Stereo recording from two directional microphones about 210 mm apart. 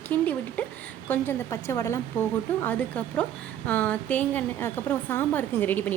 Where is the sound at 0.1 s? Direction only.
10° left (ahead or behind).